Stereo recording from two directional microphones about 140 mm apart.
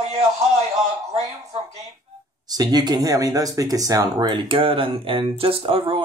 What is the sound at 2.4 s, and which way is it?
Speech, 25° right (ahead or behind).